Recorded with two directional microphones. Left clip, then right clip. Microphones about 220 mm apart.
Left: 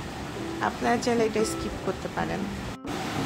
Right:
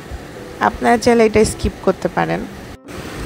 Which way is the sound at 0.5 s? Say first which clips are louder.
Right 12 dB; 35° right (ahead or behind).